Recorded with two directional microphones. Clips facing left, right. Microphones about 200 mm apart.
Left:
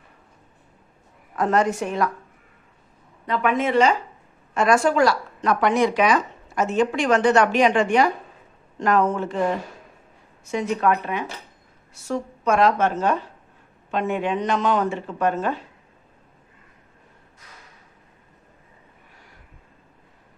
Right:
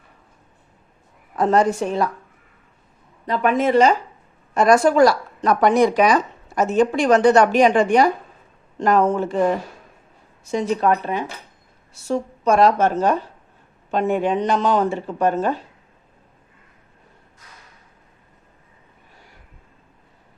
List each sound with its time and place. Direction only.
1.4 s speech: 30° right (ahead or behind)
3.2 s speech: 35° right (ahead or behind)
10.5 s speech: 35° right (ahead or behind)